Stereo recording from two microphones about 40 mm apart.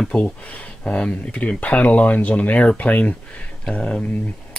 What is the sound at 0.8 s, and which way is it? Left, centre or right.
Speech, left.